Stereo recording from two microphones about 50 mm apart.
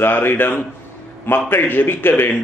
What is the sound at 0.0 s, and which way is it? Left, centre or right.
A man's voice, left.